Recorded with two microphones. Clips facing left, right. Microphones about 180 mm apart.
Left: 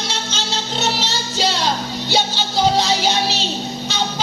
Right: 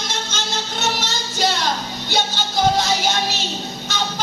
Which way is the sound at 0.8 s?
50° right (ahead or behind).